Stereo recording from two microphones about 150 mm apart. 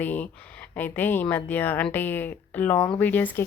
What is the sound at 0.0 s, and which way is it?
Speech, 10° left (ahead or behind).